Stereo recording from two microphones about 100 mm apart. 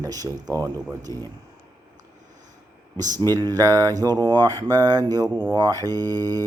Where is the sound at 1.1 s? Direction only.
35° left (ahead or behind).